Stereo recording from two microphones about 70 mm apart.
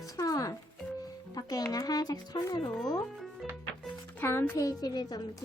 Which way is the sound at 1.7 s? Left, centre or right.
Left.